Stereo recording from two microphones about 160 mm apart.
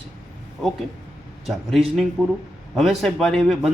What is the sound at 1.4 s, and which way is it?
A man's voice, centre (ahead or behind).